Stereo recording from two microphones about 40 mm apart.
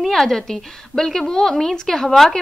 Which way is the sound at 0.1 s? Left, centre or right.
Centre.